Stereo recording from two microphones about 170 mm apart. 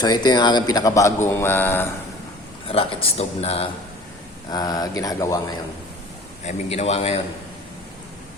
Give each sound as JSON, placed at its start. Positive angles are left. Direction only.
{"t": 0.0, "sound": "speech", "side_deg": 25}
{"t": 2.6, "sound": "speech", "side_deg": 35}
{"t": 4.4, "sound": "speech", "side_deg": 25}
{"t": 6.4, "sound": "speech", "side_deg": 40}